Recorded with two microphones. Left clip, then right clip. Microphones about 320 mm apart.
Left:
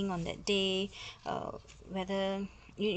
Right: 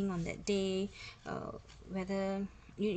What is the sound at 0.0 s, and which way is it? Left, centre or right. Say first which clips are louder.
Speech: left 2 dB; centre.